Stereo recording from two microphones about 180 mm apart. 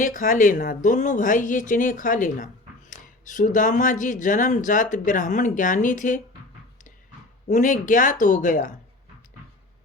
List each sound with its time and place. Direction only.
0.0 s speech: 50° left (ahead or behind)
7.4 s speech: 45° left (ahead or behind)